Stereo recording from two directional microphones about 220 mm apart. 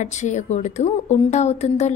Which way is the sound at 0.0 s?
30° left (ahead or behind).